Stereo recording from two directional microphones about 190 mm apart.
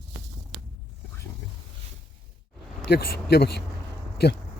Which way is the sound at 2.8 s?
60° left (ahead or behind).